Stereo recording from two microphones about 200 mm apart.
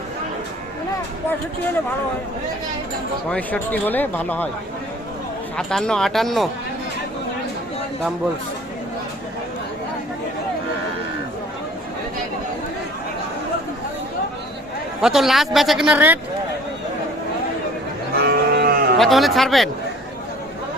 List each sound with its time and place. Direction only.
3.2 s speech: 5° left (ahead or behind)
5.5 s a man's voice: 5° left (ahead or behind)
15.0 s a man's voice: centre (ahead or behind)
18.2 s cattle: 50° right (ahead or behind)
18.9 s a man's voice: centre (ahead or behind)